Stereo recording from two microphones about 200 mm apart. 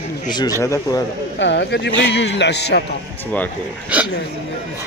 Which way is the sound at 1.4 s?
60° left (ahead or behind).